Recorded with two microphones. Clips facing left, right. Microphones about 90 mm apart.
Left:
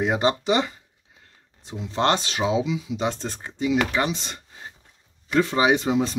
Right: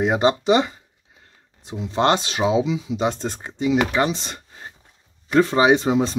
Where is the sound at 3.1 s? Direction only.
20° right (ahead or behind).